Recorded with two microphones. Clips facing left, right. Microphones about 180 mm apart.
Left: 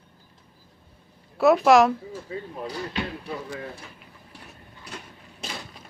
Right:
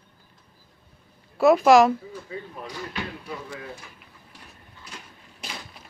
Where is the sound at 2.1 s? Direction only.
35° left (ahead or behind).